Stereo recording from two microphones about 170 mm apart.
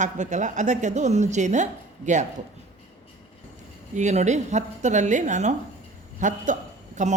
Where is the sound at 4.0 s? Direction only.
45° right (ahead or behind).